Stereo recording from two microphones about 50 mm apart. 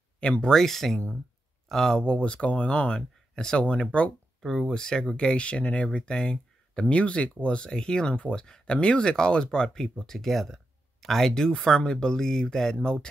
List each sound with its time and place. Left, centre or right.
0.2 s speech: left
0.5 s speech: centre
2.0 s speech: left
4.4 s speech: centre